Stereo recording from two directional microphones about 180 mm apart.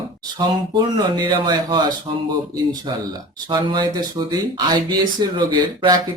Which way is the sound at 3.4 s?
25° right (ahead or behind).